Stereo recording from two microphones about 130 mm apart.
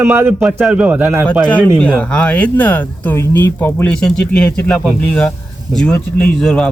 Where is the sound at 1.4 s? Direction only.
10° left (ahead or behind).